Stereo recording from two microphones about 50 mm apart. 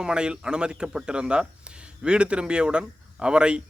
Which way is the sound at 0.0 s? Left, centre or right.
Centre.